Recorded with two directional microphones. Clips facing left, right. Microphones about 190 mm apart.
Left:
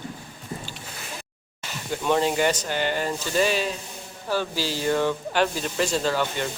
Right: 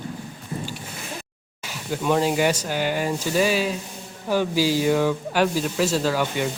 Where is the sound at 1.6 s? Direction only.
5° right (ahead or behind).